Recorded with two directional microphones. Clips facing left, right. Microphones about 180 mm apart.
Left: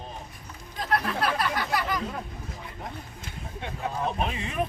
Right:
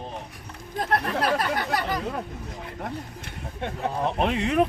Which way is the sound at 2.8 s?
65° right (ahead or behind).